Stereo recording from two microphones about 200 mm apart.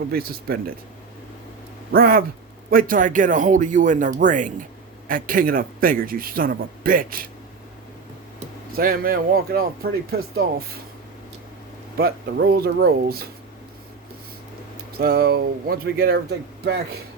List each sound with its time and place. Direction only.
0.1 s a man's voice: 50° right (ahead or behind)
1.9 s a man's voice: 45° right (ahead or behind)
8.7 s a man's voice: 45° right (ahead or behind)
11.9 s a man's voice: 50° right (ahead or behind)
14.9 s a man's voice: 50° right (ahead or behind)